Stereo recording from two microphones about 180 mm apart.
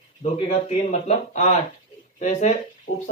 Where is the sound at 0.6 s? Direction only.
40° left (ahead or behind).